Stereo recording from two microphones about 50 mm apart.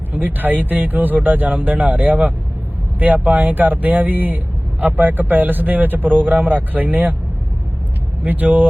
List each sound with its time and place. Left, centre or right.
0.1 s a man's voice: right
8.2 s a man's voice: right